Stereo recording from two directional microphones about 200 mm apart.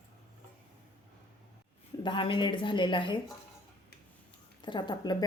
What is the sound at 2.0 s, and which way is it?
Speech, 25° left (ahead or behind).